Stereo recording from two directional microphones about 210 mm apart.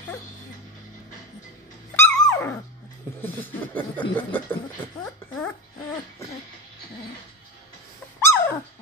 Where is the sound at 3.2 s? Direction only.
10° left (ahead or behind).